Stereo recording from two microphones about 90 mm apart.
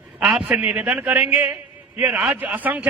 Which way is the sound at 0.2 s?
10° right (ahead or behind).